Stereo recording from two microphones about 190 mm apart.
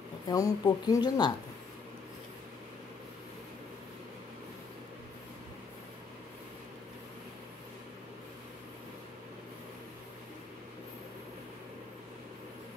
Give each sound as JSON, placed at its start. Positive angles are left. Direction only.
{"t": 0.3, "sound": "speech", "side_deg": 20}